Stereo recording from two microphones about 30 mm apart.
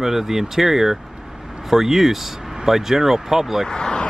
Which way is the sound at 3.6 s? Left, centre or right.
Left.